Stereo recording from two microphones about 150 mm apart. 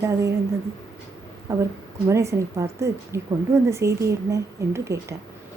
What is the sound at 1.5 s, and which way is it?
A woman's voice, 20° right (ahead or behind).